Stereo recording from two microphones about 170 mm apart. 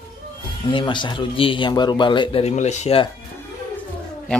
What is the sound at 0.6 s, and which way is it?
Speech, 30° left (ahead or behind).